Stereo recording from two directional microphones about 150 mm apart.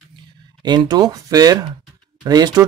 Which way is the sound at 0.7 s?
30° right (ahead or behind).